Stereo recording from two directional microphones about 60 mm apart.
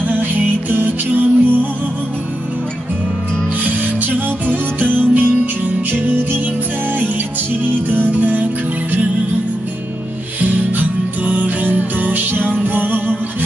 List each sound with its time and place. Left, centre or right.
0.0 s music: right
3.8 s music: right
7.6 s music: right
10.4 s music: right